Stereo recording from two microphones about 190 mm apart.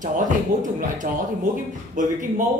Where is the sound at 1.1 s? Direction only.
50° right (ahead or behind).